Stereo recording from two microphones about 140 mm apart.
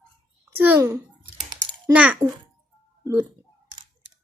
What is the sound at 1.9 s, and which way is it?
A woman's voice, 10° right (ahead or behind).